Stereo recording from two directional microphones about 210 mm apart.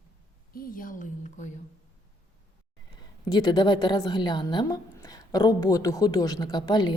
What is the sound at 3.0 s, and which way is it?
A woman's voice, 20° left (ahead or behind).